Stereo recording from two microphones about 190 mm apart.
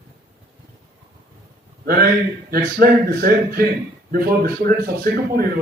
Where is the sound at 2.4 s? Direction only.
50° right (ahead or behind).